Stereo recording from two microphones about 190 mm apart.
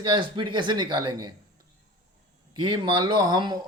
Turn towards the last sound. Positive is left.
turn(degrees=-20)  # may be behind; listen again after turning